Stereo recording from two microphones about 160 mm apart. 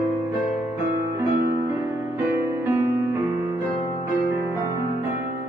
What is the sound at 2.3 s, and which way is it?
Music, 15° right (ahead or behind).